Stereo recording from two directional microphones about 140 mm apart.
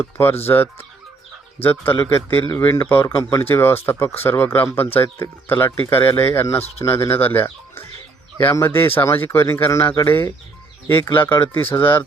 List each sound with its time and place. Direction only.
0.0 s speech: 15° left (ahead or behind)